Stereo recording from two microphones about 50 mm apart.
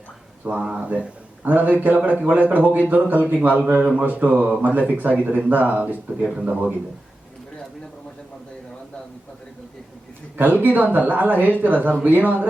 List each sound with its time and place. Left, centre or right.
0.7 s speech: right
10.3 s speech: right